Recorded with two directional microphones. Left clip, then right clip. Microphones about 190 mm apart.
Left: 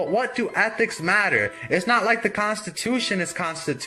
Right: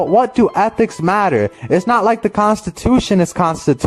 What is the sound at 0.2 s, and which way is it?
Speech, 45° right (ahead or behind).